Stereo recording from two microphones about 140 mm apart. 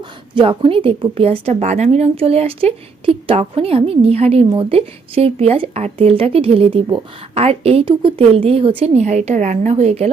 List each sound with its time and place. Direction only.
0.3 s a woman's voice: 40° right (ahead or behind)